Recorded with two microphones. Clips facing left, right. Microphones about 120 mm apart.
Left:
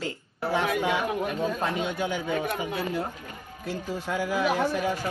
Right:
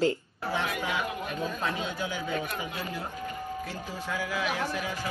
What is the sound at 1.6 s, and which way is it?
Speech, 55° left (ahead or behind).